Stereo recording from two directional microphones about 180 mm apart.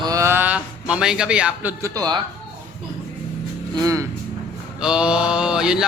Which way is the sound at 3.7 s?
20° right (ahead or behind).